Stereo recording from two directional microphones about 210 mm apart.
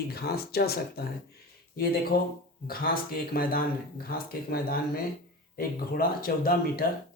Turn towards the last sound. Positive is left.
turn(degrees=45)  # may be behind; listen again after turning